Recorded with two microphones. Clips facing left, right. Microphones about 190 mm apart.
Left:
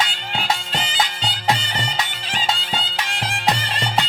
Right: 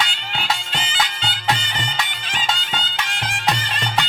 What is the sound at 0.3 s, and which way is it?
Music, 40° left (ahead or behind).